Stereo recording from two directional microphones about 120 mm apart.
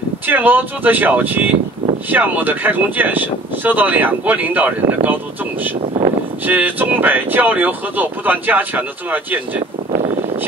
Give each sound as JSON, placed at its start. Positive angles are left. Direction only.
{"t": 0.3, "sound": "speech", "side_deg": -15}
{"t": 5.8, "sound": "speech", "side_deg": -55}
{"t": 6.4, "sound": "speech", "side_deg": -15}